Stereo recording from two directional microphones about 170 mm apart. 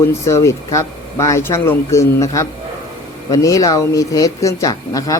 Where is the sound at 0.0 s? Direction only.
15° left (ahead or behind).